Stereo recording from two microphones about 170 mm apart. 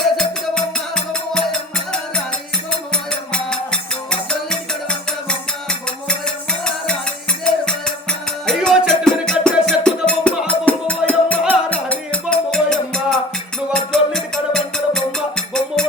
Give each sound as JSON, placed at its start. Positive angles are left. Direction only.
{"t": 0.0, "sound": "music", "side_deg": 5}